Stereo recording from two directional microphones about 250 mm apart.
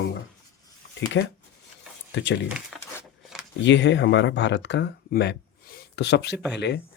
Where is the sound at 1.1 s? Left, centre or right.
Left.